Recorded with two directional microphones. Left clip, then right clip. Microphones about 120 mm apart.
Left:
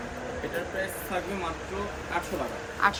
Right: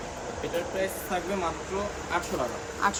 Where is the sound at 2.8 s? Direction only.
35° right (ahead or behind).